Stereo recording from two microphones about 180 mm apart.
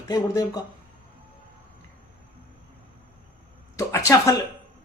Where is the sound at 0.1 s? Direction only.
20° left (ahead or behind).